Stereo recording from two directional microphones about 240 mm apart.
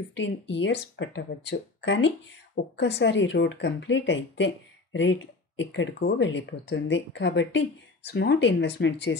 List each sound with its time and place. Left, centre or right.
0.2 s speech: left